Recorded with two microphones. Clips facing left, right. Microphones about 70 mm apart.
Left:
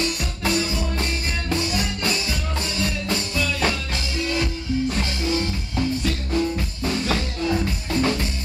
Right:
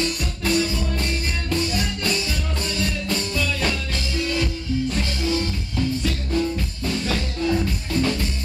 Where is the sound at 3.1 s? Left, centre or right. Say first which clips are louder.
Even; centre.